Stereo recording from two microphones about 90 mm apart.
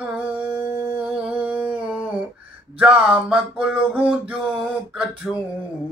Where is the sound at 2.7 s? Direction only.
10° right (ahead or behind).